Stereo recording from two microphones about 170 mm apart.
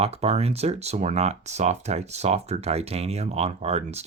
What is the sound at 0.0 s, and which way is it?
Speech, 35° right (ahead or behind).